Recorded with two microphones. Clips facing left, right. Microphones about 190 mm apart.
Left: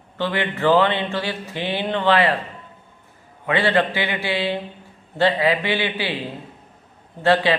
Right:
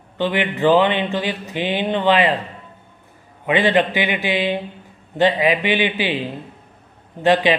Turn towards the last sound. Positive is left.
turn(degrees=-15)  # may be behind; listen again after turning